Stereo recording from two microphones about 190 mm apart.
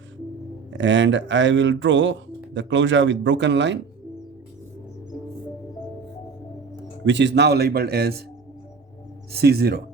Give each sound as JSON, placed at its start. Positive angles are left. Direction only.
{"t": 0.7, "sound": "speech", "side_deg": -75}
{"t": 7.0, "sound": "speech", "side_deg": -70}
{"t": 9.3, "sound": "speech", "side_deg": -55}